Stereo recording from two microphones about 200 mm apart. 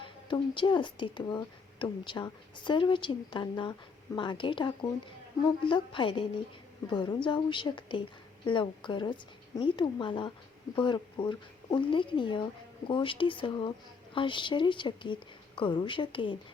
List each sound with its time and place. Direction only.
0.0 s speech: 25° left (ahead or behind)